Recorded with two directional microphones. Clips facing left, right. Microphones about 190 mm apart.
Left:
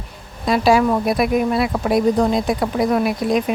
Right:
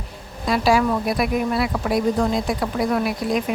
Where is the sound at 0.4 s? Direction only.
25° left (ahead or behind).